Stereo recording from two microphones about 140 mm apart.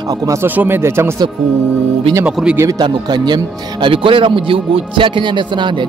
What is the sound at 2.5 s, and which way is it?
Speech, 25° right (ahead or behind).